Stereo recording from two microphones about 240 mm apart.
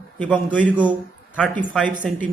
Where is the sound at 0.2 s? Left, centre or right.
Centre.